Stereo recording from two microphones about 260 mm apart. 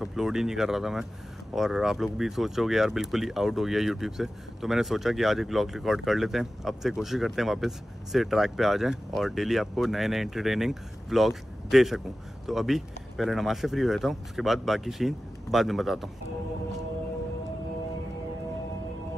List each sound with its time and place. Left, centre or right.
0.0 s speech: centre